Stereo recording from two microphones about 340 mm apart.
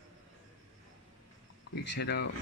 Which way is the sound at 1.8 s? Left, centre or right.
Left.